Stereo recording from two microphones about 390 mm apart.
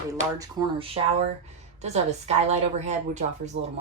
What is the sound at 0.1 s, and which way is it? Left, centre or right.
A woman's voice, centre.